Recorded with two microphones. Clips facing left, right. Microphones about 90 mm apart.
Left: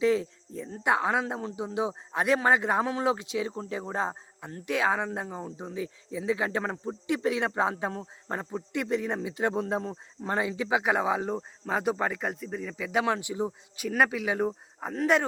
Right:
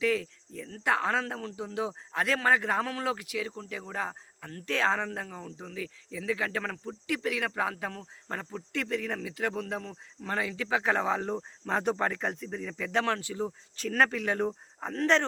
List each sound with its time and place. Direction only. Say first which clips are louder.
0.0 s speech: left 4 dB; 25° left (ahead or behind)